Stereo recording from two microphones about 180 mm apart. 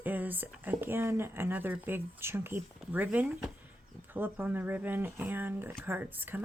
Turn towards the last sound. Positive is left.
turn(degrees=-10)  # may be behind; listen again after turning